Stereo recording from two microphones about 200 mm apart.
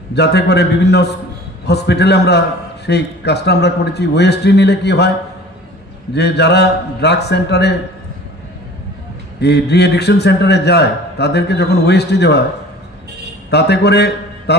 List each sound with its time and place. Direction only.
0.1 s a man's voice: 55° left (ahead or behind)
6.1 s a man's voice: 55° left (ahead or behind)
9.4 s a man's voice: 55° left (ahead or behind)
13.5 s a man's voice: 55° left (ahead or behind)